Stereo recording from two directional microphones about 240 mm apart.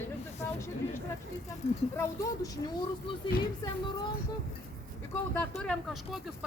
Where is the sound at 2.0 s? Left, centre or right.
Centre.